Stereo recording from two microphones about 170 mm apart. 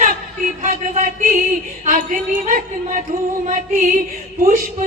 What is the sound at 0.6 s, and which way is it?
Music, 45° right (ahead or behind).